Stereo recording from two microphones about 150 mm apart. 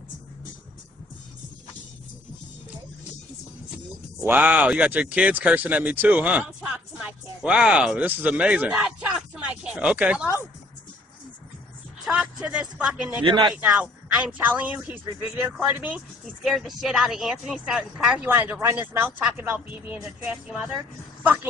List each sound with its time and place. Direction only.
4.2 s speech: 10° right (ahead or behind)
12.0 s speech: 5° right (ahead or behind)
13.2 s speech: 35° right (ahead or behind)
13.7 s speech: 10° right (ahead or behind)
18.3 s speech: 15° right (ahead or behind)